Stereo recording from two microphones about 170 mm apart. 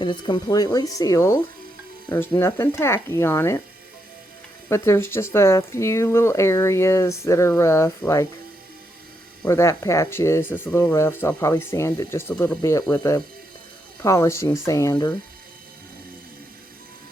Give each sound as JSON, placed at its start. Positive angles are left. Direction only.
{"t": 0.0, "sound": "speech", "side_deg": 25}
{"t": 4.7, "sound": "speech", "side_deg": 15}
{"t": 9.5, "sound": "speech", "side_deg": 15}